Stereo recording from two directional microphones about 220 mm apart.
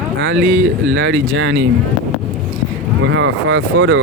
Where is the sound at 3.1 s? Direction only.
65° right (ahead or behind).